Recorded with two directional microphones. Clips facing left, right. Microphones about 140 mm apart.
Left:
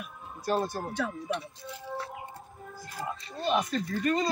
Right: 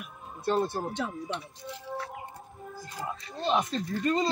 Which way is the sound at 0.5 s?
25° right (ahead or behind).